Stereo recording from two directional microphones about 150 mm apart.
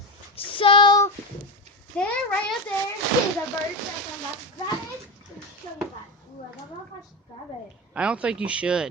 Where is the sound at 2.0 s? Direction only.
5° left (ahead or behind).